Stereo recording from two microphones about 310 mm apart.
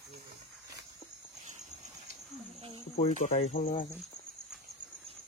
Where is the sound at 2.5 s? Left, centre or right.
Centre.